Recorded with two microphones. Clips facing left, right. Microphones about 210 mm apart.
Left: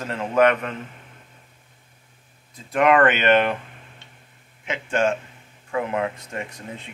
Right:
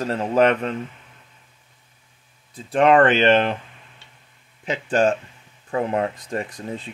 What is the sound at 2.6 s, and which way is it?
Speech, 30° right (ahead or behind).